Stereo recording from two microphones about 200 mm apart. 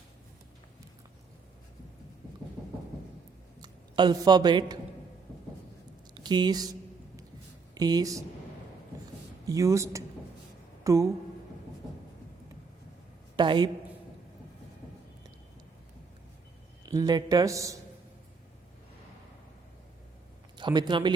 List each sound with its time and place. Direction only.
3.6 s speech: 20° right (ahead or behind)
6.1 s speech: 20° right (ahead or behind)
7.8 s a man's voice: 20° right (ahead or behind)
9.5 s speech: 15° right (ahead or behind)
13.3 s a woman's voice: 20° right (ahead or behind)
16.8 s a man's voice: 20° right (ahead or behind)
20.6 s speech: 20° right (ahead or behind)